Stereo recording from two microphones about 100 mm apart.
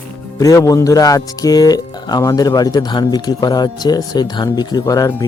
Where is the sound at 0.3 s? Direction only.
35° left (ahead or behind).